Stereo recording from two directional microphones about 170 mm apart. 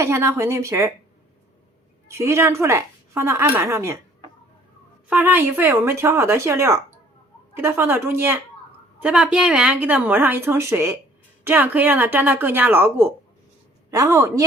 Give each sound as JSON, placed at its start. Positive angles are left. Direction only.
{"t": 0.0, "sound": "a woman's voice", "side_deg": -15}
{"t": 2.0, "sound": "a woman's voice", "side_deg": -15}
{"t": 5.0, "sound": "a woman's voice", "side_deg": -10}